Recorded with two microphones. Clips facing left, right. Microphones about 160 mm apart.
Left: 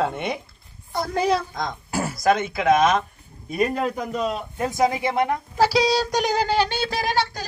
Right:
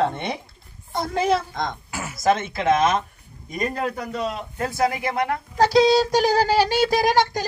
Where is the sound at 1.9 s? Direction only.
35° left (ahead or behind).